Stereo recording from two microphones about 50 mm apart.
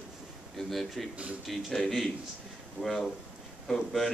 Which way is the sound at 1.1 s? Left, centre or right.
Right.